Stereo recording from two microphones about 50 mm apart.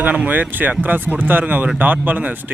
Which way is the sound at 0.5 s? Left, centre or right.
Right.